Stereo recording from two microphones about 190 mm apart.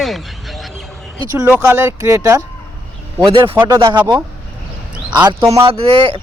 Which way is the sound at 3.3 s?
30° right (ahead or behind).